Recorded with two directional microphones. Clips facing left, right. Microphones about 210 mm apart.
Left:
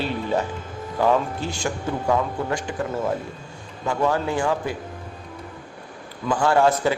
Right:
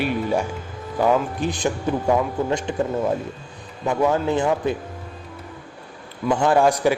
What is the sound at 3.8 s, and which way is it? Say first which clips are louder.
Speech: right 3 dB; 20° right (ahead or behind).